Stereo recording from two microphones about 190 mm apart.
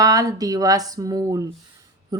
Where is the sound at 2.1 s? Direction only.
20° right (ahead or behind).